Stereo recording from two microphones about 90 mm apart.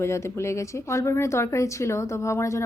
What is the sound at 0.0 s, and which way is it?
A woman's voice, 30° left (ahead or behind).